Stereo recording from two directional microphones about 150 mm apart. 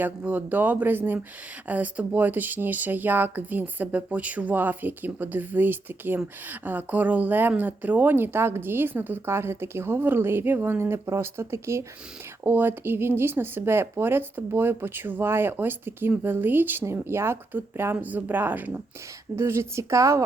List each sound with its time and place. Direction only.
0.0 s a woman's voice: 10° right (ahead or behind)